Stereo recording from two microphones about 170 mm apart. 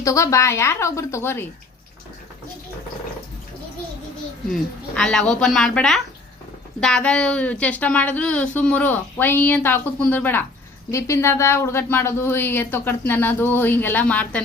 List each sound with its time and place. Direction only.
0.0 s a woman's voice: 20° left (ahead or behind)
4.5 s a woman's voice: 5° left (ahead or behind)